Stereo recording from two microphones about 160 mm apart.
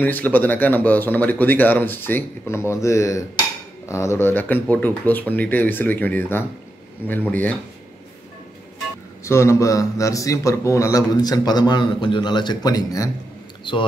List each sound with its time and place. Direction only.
0.0 s speech: 10° left (ahead or behind)
9.2 s a man's voice: 20° left (ahead or behind)